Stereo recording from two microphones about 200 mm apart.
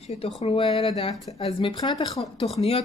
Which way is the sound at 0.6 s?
25° left (ahead or behind).